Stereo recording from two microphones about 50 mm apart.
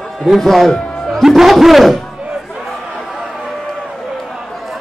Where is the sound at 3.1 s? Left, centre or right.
Centre.